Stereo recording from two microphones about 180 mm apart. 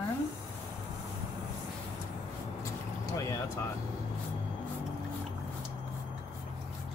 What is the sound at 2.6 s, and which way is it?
Vehicle, 20° left (ahead or behind).